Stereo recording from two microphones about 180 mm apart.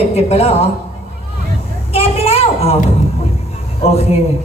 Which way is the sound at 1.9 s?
35° left (ahead or behind).